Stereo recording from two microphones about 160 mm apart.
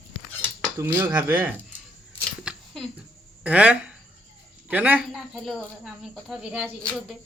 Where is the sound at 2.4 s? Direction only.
Centre (ahead or behind).